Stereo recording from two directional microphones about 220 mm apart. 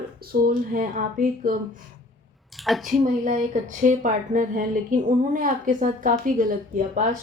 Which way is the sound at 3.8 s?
35° right (ahead or behind).